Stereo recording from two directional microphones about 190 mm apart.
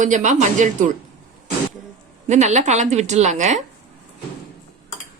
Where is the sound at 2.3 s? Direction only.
40° right (ahead or behind).